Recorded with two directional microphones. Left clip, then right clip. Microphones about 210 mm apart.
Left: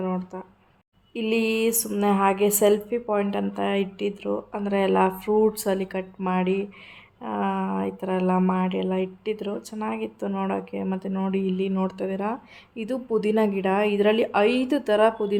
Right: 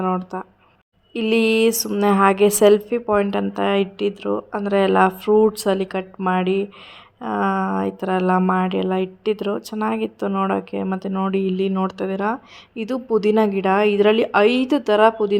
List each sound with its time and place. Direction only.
0.0 s speech: 20° right (ahead or behind)